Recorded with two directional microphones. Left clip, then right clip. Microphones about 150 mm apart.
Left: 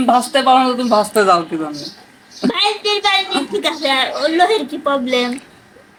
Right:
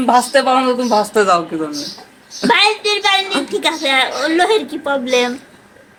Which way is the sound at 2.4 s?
15° right (ahead or behind).